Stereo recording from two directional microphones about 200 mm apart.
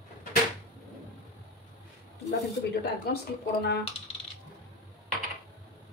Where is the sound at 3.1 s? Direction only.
55° left (ahead or behind).